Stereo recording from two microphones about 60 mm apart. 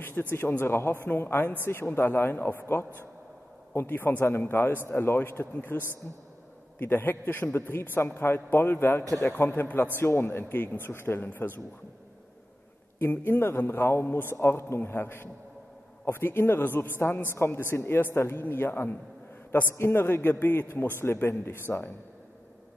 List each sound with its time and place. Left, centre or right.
0.0 s a man's voice: left
10.4 s a man's voice: left
13.0 s a man's voice: left